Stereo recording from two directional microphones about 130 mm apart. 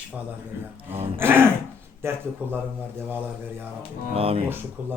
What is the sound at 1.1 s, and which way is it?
A man's voice, 15° right (ahead or behind).